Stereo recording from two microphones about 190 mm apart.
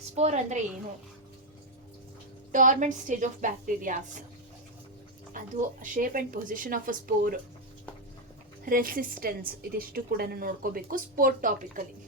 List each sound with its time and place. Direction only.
0.2 s a woman's voice: 35° right (ahead or behind)
2.5 s a woman's voice: 40° right (ahead or behind)
5.3 s a woman's voice: 45° right (ahead or behind)
8.6 s a woman's voice: 50° right (ahead or behind)